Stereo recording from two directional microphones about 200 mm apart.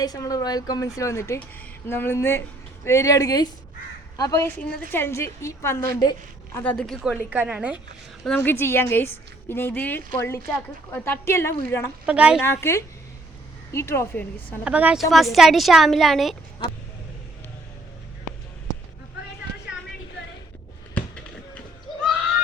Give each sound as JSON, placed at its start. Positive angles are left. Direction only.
{"t": 0.0, "sound": "a woman's voice", "side_deg": 20}
{"t": 6.6, "sound": "a woman's voice", "side_deg": 5}
{"t": 8.2, "sound": "a woman's voice", "side_deg": 5}
{"t": 12.0, "sound": "a woman's voice", "side_deg": -5}
{"t": 12.4, "sound": "a woman's voice", "side_deg": 10}
{"t": 14.6, "sound": "a woman's voice", "side_deg": -5}